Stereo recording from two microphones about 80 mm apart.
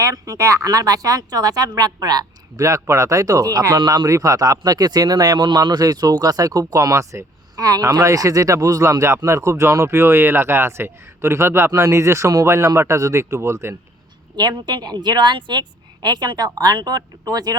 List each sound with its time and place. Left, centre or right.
0.0 s speech: right
2.6 s speech: right
6.9 s speech: right
14.3 s a woman's voice: right